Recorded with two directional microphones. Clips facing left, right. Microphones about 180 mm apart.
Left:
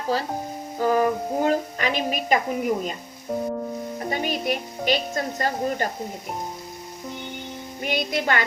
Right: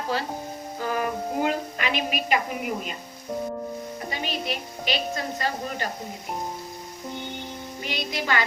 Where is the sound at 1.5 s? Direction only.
40° left (ahead or behind).